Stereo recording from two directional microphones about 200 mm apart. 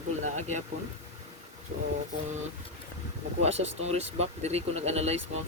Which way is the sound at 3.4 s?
30° right (ahead or behind).